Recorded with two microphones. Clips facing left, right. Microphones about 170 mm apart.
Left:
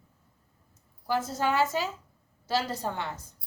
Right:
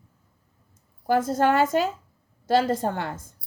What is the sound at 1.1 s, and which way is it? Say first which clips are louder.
A woman's voice: right 7 dB; 50° right (ahead or behind).